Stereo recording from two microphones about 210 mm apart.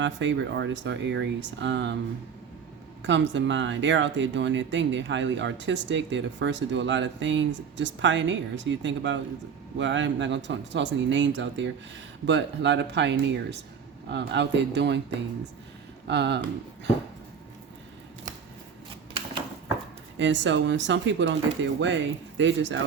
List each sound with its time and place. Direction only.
0.0 s speech: 60° right (ahead or behind)
3.0 s speech: 60° right (ahead or behind)
16.0 s speech: 55° right (ahead or behind)
20.1 s speech: 60° right (ahead or behind)